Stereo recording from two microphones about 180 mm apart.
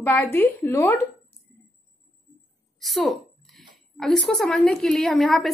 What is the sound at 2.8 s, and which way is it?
A woman's voice, centre (ahead or behind).